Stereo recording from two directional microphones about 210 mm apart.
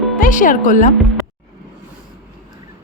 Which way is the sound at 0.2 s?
40° left (ahead or behind).